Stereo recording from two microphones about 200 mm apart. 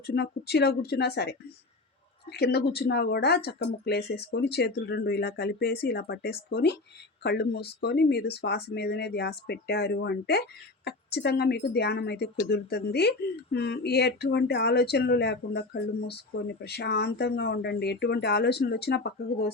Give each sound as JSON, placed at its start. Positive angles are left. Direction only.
{"t": 0.1, "sound": "speech", "side_deg": 55}